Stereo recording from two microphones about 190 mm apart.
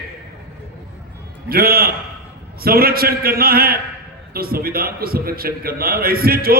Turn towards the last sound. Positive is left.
turn(degrees=-50)  # may be behind; listen again after turning